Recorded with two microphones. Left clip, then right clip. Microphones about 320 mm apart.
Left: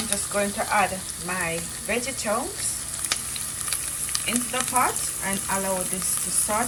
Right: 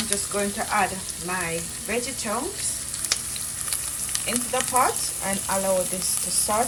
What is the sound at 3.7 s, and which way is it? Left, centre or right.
Frying, centre.